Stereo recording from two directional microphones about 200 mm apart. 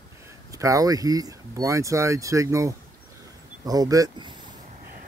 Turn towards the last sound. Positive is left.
turn(degrees=-20)  # may be behind; listen again after turning